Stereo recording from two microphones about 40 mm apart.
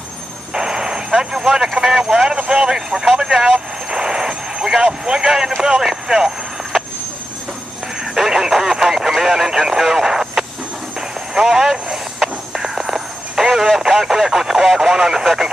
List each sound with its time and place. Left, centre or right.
0.6 s speech: centre
3.5 s vehicle: centre
4.8 s speech: centre
6.0 s vehicle: centre
8.0 s radio: centre
11.0 s a sound: centre